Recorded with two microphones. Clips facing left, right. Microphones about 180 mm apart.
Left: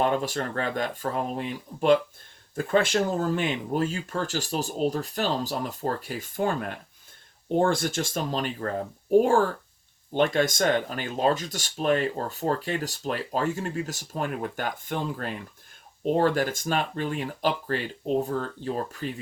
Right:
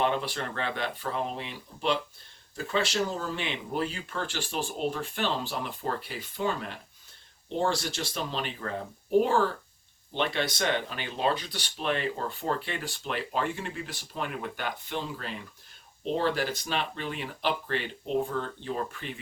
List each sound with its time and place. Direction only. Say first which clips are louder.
0.0 s speech: left 3 dB; 45° left (ahead or behind)